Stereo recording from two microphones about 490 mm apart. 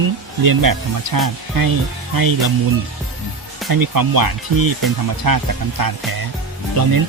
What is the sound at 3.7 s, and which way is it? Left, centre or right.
Speech, right.